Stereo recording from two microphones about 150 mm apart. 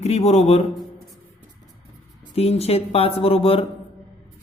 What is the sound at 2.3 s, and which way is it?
Speech, 40° left (ahead or behind).